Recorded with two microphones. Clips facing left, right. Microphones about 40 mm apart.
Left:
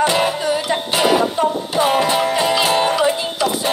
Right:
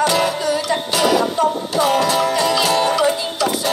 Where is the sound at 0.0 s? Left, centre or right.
Left.